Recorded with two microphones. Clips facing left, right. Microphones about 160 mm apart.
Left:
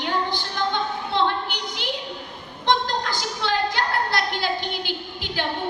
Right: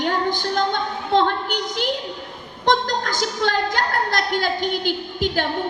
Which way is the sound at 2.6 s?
45° right (ahead or behind).